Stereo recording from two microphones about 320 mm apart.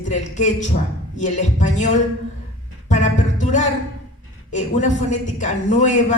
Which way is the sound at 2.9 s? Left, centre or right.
Left.